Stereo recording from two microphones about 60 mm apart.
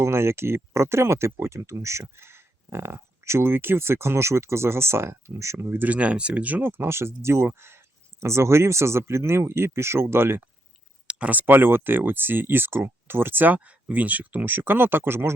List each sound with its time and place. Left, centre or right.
0.0 s speech: right
5.7 s speech: right
6.6 s speech: right
11.0 s a sound: centre
11.3 s speech: right